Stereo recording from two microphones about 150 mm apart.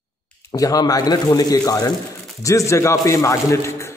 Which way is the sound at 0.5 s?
25° left (ahead or behind).